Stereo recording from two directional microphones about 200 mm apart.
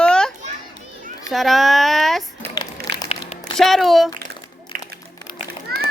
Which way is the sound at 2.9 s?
60° right (ahead or behind).